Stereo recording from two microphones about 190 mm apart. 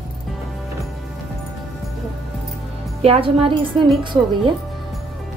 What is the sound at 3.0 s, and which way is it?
Speech, 30° right (ahead or behind).